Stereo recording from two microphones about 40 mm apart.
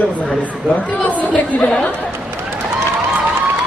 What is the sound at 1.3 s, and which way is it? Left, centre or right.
Speech, left.